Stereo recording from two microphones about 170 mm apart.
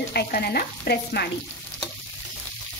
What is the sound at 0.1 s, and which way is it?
A woman's voice, 65° left (ahead or behind).